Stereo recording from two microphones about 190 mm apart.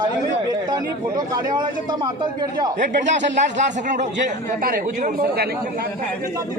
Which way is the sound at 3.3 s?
40° right (ahead or behind).